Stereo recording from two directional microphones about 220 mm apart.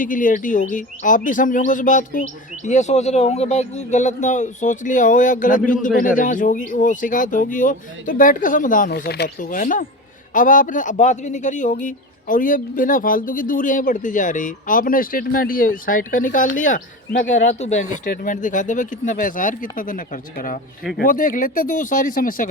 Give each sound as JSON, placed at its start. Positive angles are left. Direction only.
{"t": 0.0, "sound": "a man's voice", "side_deg": 35}